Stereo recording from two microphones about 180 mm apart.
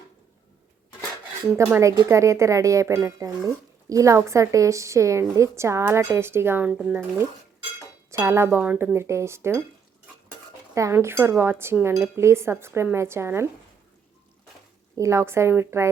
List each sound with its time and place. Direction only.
1.5 s speech: 15° right (ahead or behind)
8.1 s speech: 15° right (ahead or behind)
10.8 s speech: 15° right (ahead or behind)
14.9 s speech: 15° right (ahead or behind)